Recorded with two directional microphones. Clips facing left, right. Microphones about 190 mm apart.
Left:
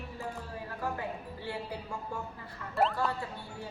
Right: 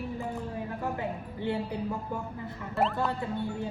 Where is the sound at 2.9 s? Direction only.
20° right (ahead or behind).